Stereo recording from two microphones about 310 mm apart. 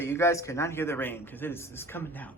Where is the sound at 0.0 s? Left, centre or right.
Centre.